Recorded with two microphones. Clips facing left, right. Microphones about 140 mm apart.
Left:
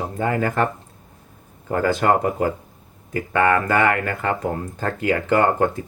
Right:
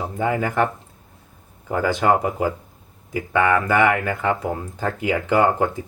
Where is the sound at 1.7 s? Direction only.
10° right (ahead or behind).